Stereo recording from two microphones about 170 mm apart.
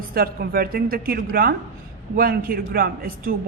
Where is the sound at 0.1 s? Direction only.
60° right (ahead or behind).